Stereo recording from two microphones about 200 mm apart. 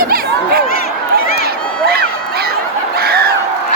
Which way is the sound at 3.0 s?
50° right (ahead or behind).